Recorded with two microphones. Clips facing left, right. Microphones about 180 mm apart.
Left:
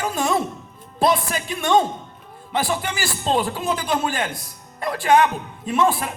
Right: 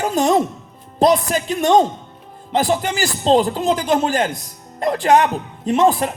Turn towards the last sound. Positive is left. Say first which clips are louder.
# right 5 dB
turn(degrees=-40)  # may be behind; listen again after turning